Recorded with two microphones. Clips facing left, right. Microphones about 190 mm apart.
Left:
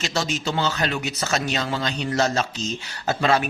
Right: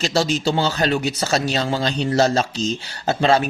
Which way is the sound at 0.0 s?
35° right (ahead or behind).